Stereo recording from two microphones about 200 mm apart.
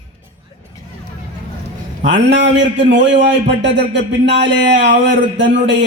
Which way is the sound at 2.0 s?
65° right (ahead or behind).